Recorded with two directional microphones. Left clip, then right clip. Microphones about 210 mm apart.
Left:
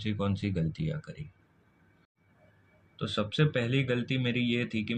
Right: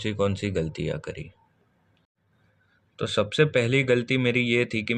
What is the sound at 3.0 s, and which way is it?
Speech, 50° right (ahead or behind).